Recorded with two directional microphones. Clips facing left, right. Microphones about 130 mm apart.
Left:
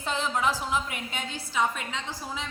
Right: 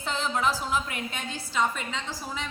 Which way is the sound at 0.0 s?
15° left (ahead or behind).